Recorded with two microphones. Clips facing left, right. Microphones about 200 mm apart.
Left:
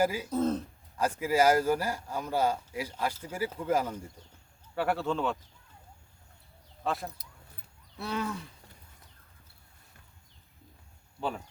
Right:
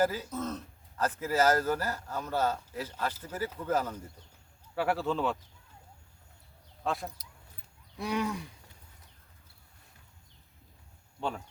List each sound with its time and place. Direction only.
0.0 s a man's voice: 10° left (ahead or behind)
0.3 s speech: 30° left (ahead or behind)
0.9 s a man's voice: 10° left (ahead or behind)
4.7 s speech: centre (ahead or behind)
6.8 s speech: centre (ahead or behind)
7.9 s wild animals: 15° right (ahead or behind)
11.2 s speech: centre (ahead or behind)